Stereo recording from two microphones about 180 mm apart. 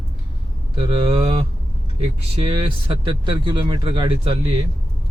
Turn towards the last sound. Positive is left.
turn(degrees=-30)  # may be behind; listen again after turning